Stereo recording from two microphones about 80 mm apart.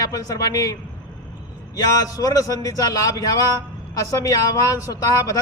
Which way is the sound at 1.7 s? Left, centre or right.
Left.